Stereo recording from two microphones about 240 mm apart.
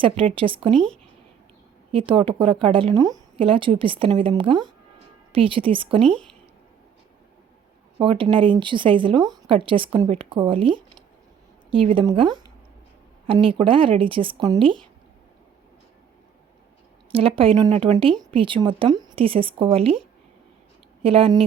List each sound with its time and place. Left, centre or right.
0.0 s a woman's voice: right
1.9 s a woman's voice: right
6.0 s speech: centre
7.9 s a woman's voice: right
17.1 s a woman's voice: right
21.0 s a woman's voice: right